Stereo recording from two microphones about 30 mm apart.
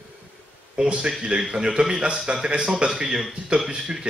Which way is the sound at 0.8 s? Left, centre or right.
Right.